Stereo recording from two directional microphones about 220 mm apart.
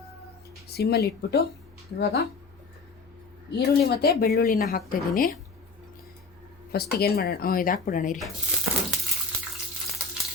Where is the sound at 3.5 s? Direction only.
45° left (ahead or behind).